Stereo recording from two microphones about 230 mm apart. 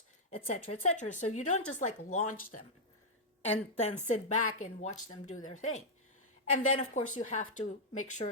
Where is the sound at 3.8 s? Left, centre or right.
Left.